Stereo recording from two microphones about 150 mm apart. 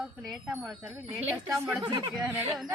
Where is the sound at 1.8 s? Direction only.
30° right (ahead or behind).